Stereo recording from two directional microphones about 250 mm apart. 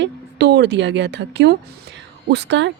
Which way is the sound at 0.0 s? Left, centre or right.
Right.